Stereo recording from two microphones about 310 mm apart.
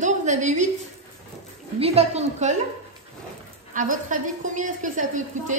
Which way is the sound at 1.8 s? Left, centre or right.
Centre.